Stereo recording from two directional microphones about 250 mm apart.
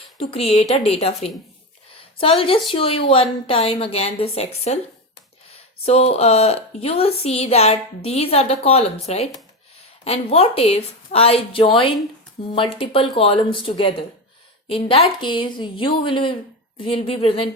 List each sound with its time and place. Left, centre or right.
0.2 s a woman's voice: left
5.8 s a woman's voice: left